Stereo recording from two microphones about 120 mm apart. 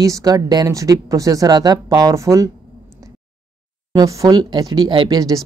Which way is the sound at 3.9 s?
30° right (ahead or behind).